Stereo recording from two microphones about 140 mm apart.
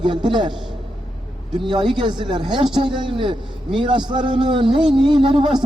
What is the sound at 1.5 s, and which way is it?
A man's voice, 35° right (ahead or behind).